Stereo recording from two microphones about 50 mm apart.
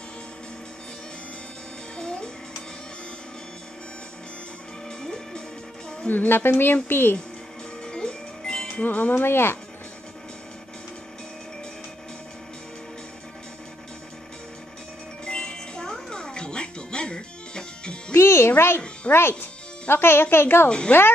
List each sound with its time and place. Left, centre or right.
2.0 s music: centre
4.8 s music: centre
6.0 s a woman's voice: left
7.8 s music: centre
8.8 s speech: left
9.2 s a woman's voice: left
15.2 s music: centre
18.1 s music: left
19.1 s a woman's voice: left
19.9 s a woman's voice: left
20.6 s a woman's voice: centre